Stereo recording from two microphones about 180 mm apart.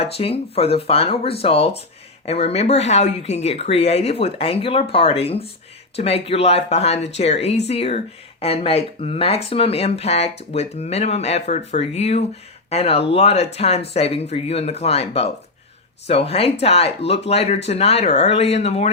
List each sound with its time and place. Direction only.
0.0 s speech: 35° left (ahead or behind)